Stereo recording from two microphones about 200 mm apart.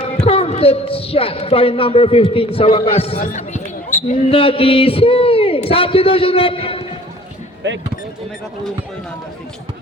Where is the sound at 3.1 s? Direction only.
35° left (ahead or behind).